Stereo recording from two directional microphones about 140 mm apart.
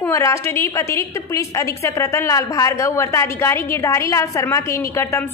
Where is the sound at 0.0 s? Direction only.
20° left (ahead or behind).